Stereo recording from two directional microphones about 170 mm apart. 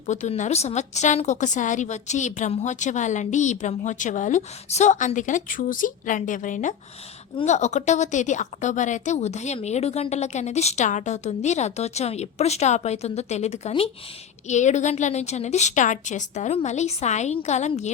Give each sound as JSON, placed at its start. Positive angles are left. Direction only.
{"t": 0.1, "sound": "a woman's voice", "side_deg": 45}